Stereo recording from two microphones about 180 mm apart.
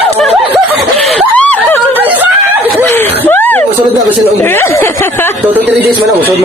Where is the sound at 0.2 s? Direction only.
Centre (ahead or behind).